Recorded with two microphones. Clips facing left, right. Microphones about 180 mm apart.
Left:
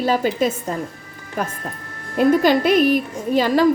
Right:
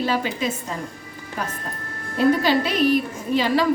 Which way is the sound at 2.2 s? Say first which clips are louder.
Left 3 dB; 50° left (ahead or behind).